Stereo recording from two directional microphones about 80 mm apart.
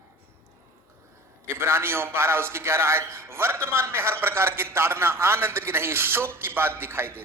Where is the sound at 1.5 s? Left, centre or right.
Right.